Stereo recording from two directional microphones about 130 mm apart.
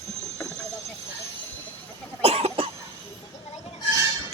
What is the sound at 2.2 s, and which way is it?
Cough, 50° right (ahead or behind).